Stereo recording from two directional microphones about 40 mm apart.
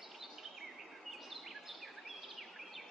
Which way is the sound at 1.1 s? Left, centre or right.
Centre.